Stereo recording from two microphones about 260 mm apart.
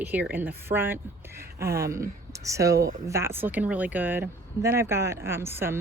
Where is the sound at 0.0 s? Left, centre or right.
Centre.